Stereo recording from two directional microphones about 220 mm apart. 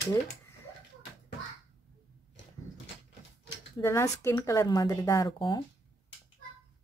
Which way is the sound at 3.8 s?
15° left (ahead or behind).